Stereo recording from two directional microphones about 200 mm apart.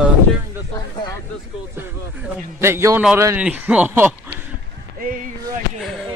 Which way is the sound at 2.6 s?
15° right (ahead or behind).